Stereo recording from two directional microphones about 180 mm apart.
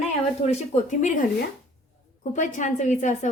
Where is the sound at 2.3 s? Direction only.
45° left (ahead or behind).